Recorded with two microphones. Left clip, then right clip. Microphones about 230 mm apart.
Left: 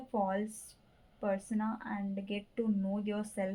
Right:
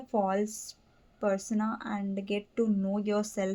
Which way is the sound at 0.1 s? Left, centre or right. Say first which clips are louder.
Right 5 dB; right.